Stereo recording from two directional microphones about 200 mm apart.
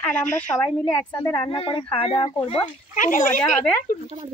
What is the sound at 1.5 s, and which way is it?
Speech, 25° left (ahead or behind).